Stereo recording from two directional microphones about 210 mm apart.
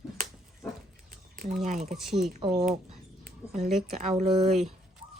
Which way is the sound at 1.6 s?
35° right (ahead or behind).